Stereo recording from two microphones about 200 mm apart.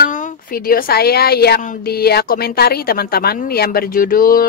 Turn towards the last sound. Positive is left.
turn(degrees=45)  # may be behind; listen again after turning